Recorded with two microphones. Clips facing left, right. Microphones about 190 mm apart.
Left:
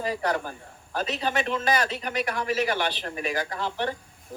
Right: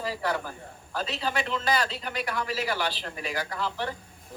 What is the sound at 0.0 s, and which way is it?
A woman's voice, 20° left (ahead or behind).